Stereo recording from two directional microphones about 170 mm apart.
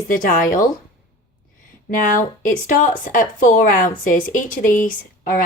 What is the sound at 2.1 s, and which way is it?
Speech, 50° left (ahead or behind).